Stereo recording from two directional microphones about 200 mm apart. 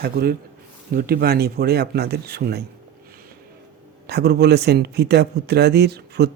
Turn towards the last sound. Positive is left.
turn(degrees=-55)  # may be behind; listen again after turning